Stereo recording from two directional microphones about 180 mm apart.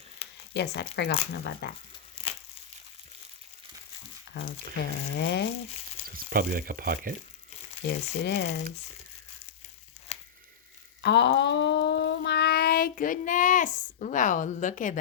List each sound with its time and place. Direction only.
0.5 s speech: 70° left (ahead or behind)
2.2 s crumpling: 30° left (ahead or behind)
4.3 s a sound: 65° left (ahead or behind)
5.1 s speech: 70° left (ahead or behind)
6.1 s speech: 55° right (ahead or behind)
7.9 s speech: 70° left (ahead or behind)
10.1 s a sound: 35° left (ahead or behind)
11.0 s child singing: 70° left (ahead or behind); by 14.9 s 45° left (ahead or behind)